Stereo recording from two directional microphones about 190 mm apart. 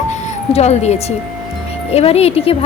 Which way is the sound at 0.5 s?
35° left (ahead or behind).